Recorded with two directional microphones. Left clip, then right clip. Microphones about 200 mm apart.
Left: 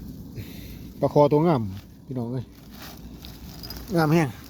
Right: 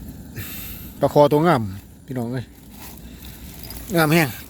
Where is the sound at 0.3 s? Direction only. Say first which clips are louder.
Right 6 dB; centre (ahead or behind).